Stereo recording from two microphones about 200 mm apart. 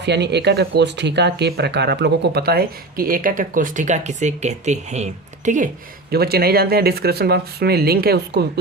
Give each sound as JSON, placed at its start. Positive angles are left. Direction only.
{"t": 0.0, "sound": "speech", "side_deg": -60}
{"t": 6.1, "sound": "speech", "side_deg": -50}